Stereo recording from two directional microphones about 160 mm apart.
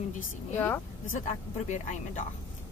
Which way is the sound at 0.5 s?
15° left (ahead or behind).